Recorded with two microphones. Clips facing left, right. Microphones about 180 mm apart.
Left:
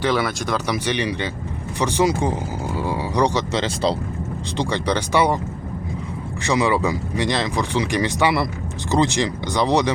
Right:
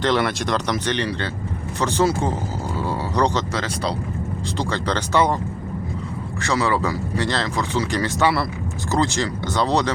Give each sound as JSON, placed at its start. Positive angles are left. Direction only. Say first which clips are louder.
{"t": 0.0, "sound": "speech", "louder": "right 1 dB", "side_deg": 5}
{"t": 2.7, "sound": "a sound", "louder": "left 1 dB", "side_deg": 15}
{"t": 3.6, "sound": "speech", "louder": "left 4 dB", "side_deg": 25}
{"t": 4.7, "sound": "speech", "louder": "left 1 dB", "side_deg": 10}
{"t": 6.4, "sound": "speech", "louder": "left 2 dB", "side_deg": 15}